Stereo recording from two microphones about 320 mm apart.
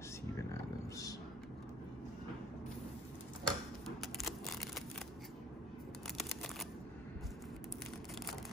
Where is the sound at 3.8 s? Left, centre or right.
Centre.